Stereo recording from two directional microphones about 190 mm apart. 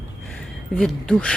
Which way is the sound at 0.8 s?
5° left (ahead or behind).